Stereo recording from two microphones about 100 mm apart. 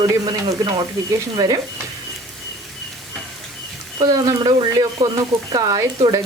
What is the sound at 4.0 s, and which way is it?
Speech, 40° right (ahead or behind).